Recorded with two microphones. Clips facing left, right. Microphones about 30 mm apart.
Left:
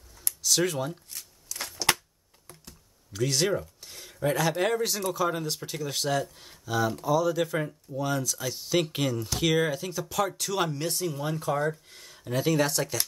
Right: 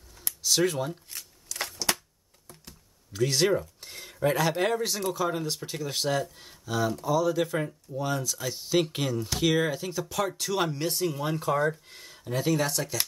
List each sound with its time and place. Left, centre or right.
0.5 s speech: centre
2.6 s computer keyboard: centre
3.8 s speech: centre
12.3 s speech: centre